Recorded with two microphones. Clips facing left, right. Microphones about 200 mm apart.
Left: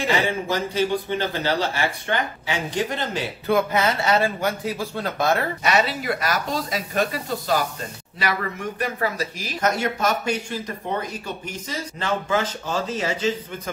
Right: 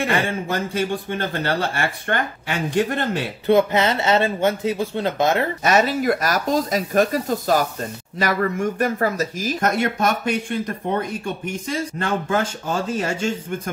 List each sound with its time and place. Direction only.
0.0 s speech: 55° right (ahead or behind)
3.4 s speech: 25° right (ahead or behind)
5.6 s speech: 45° right (ahead or behind)